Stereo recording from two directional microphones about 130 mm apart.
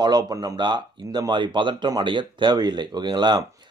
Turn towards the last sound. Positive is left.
turn(degrees=-35)  # may be behind; listen again after turning